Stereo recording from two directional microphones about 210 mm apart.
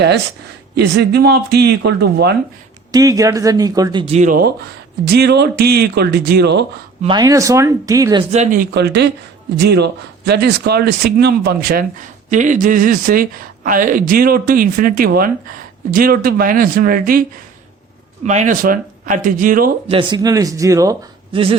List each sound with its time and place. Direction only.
0.8 s a man's voice: 50° right (ahead or behind)
2.9 s a man's voice: 15° right (ahead or behind); by 6.7 s 55° right (ahead or behind)
7.0 s speech: 20° right (ahead or behind)
8.3 s speech: 35° right (ahead or behind)
8.7 s a man's voice: 55° right (ahead or behind)
18.3 s speech: 35° right (ahead or behind)
19.9 s speech: 20° right (ahead or behind)